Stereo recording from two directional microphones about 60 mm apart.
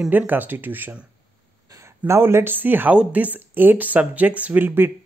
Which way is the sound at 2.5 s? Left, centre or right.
Right.